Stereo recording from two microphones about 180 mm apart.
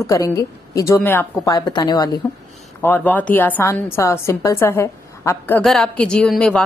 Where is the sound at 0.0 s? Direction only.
15° left (ahead or behind).